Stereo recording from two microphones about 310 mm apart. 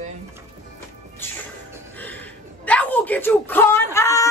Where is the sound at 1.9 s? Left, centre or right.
Centre.